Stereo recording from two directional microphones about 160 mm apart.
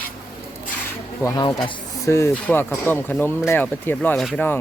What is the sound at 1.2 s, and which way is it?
Speech, 20° left (ahead or behind).